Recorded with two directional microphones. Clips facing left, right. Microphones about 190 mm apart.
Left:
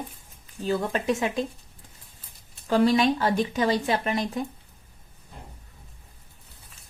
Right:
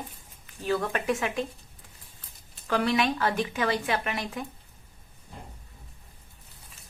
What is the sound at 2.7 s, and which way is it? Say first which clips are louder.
Speech: left 5 dB; 30° left (ahead or behind).